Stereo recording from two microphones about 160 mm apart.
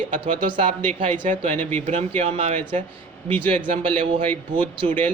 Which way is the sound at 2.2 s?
45° right (ahead or behind).